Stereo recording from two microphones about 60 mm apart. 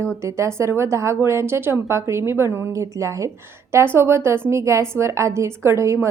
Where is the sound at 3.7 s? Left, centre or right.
Right.